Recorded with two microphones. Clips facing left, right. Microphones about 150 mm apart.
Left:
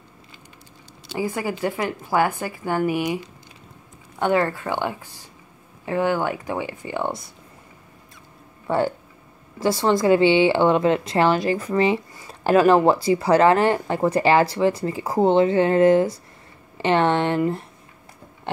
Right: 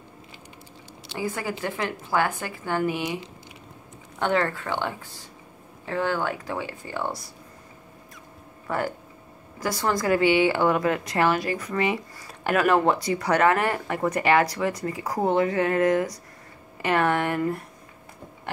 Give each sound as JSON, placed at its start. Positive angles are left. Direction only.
{"t": 1.1, "sound": "a woman's voice", "side_deg": 15}
{"t": 4.2, "sound": "a woman's voice", "side_deg": 15}
{"t": 8.6, "sound": "a woman's voice", "side_deg": 30}